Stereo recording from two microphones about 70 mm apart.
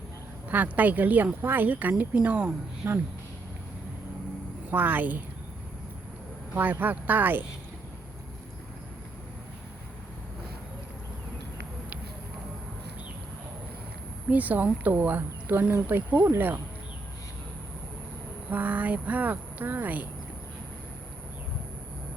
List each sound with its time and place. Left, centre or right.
0.5 s speech: right
2.8 s speech: right
4.7 s speech: right
6.6 s speech: right
14.3 s speech: right
18.5 s speech: right